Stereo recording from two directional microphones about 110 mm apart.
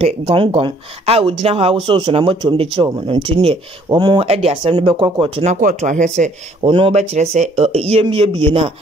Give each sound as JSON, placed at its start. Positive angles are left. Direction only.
{"t": 0.0, "sound": "speech", "side_deg": -55}
{"t": 1.9, "sound": "speech", "side_deg": -50}
{"t": 3.9, "sound": "speech", "side_deg": -40}
{"t": 4.2, "sound": "speech", "side_deg": -70}
{"t": 5.4, "sound": "speech", "side_deg": -90}
{"t": 6.6, "sound": "speech", "side_deg": -55}
{"t": 7.0, "sound": "speech", "side_deg": -90}